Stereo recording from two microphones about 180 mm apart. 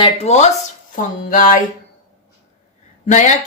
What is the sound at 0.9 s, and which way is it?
Speech, 50° left (ahead or behind).